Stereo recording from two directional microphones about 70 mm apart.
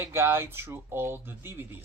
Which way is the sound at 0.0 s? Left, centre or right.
Right.